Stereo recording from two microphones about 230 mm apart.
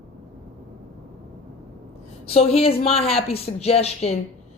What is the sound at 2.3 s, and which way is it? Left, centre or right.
Speech, left.